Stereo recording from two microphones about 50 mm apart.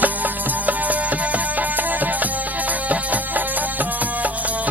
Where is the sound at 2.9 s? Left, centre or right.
Right.